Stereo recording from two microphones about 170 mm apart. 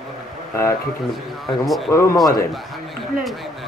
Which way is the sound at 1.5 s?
Centre (ahead or behind).